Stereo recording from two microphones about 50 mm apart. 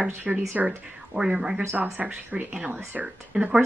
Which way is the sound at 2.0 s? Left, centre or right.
Right.